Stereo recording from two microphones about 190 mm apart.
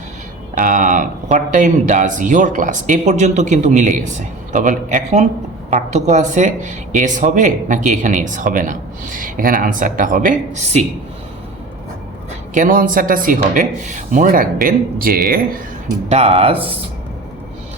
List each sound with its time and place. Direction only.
0.5 s speech: 45° right (ahead or behind)
12.5 s speech: 45° right (ahead or behind)
16.0 s speech: 30° right (ahead or behind)